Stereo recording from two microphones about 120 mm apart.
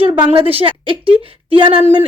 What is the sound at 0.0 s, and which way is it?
A woman's voice, 50° right (ahead or behind).